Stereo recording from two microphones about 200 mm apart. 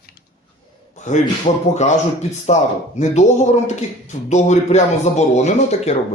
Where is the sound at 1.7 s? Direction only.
35° left (ahead or behind).